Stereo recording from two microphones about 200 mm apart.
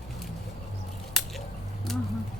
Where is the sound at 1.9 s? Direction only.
Centre (ahead or behind).